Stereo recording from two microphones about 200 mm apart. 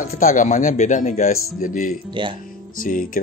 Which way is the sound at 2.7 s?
45° left (ahead or behind).